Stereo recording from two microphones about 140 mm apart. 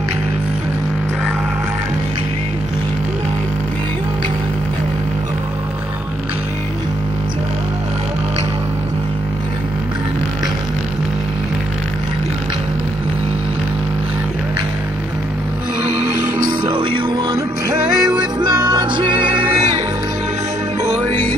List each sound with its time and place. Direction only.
16.4 s music: 35° right (ahead or behind)
17.9 s music: 5° right (ahead or behind)
18.4 s music: 30° right (ahead or behind)